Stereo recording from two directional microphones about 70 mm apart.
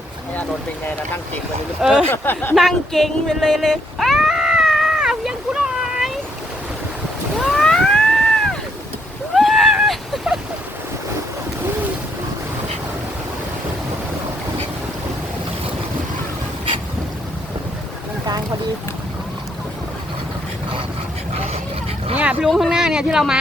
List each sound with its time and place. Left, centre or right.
1.8 s speech: centre
2.0 s speech: left
2.6 s cat: centre
7.3 s cat: centre
9.3 s a sound: centre
22.1 s vehicle: centre
22.4 s speech: centre
22.7 s speech: centre